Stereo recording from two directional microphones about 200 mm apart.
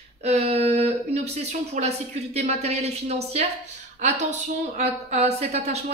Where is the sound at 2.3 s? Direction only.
30° right (ahead or behind).